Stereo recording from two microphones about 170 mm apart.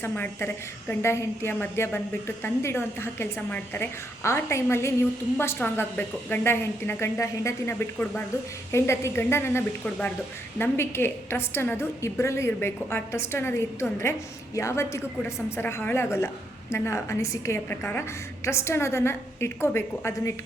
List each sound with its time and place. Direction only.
0.0 s a woman's voice: 15° left (ahead or behind)